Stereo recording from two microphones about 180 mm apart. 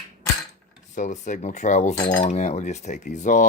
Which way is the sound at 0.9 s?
45° left (ahead or behind).